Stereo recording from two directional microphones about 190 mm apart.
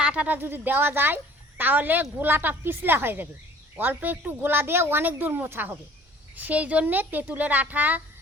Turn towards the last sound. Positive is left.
turn(degrees=-10)  # may be behind; listen again after turning